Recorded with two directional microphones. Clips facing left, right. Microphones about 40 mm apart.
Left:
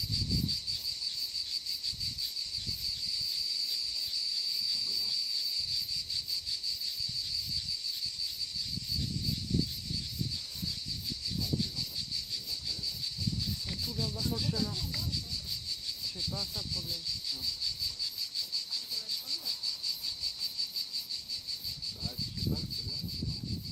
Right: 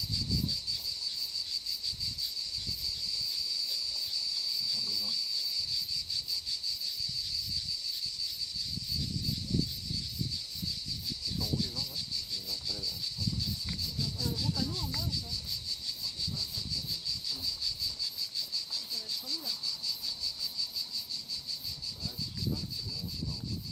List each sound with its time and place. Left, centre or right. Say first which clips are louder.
14.0 s speech: left 1 dB; centre
16.4 s speech: even; left